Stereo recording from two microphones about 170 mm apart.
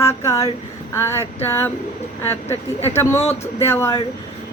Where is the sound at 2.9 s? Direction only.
15° left (ahead or behind).